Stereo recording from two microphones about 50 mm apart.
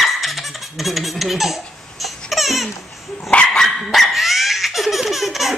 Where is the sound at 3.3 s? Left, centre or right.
Centre.